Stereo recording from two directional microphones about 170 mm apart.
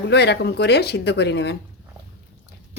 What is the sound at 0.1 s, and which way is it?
Speech, 85° left.